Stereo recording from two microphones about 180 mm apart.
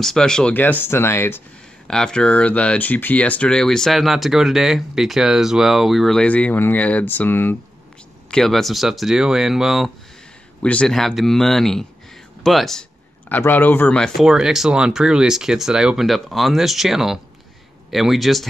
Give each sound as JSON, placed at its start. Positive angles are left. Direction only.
{"t": 0.0, "sound": "speech", "side_deg": 5}